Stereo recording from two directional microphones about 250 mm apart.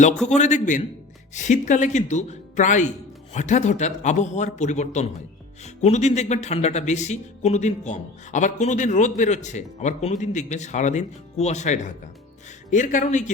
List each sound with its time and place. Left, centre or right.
0.3 s speech: left